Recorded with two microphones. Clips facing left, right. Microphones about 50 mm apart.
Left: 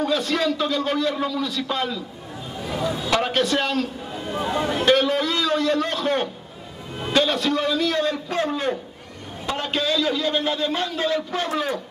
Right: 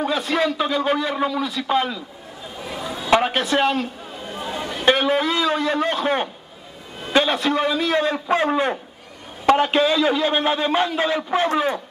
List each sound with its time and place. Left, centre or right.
0.0 s a man's voice: centre
2.6 s speech: centre
3.1 s a man's voice: centre
4.3 s speech: centre
4.8 s a man's voice: centre